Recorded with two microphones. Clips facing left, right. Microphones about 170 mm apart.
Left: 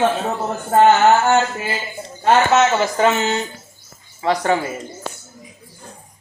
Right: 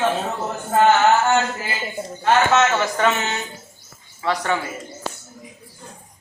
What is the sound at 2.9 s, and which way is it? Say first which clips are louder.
Speech: left 4 dB; 25° left (ahead or behind).